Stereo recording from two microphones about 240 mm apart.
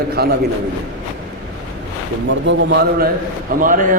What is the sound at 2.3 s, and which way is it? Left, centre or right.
A man's voice, right.